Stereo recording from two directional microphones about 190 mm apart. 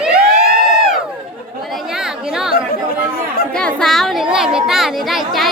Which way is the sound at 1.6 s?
Centre (ahead or behind).